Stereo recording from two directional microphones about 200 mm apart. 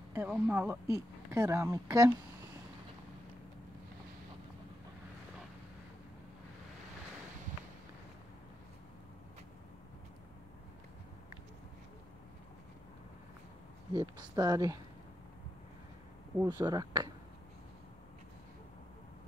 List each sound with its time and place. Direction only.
0.1 s speech: 10° right (ahead or behind)
13.9 s speech: 20° right (ahead or behind)
16.4 s speech: 20° right (ahead or behind)